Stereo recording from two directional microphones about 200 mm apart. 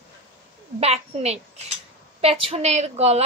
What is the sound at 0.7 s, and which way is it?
A woman's voice, 30° right (ahead or behind).